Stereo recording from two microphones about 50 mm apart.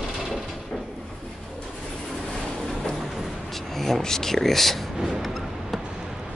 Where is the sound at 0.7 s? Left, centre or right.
Centre.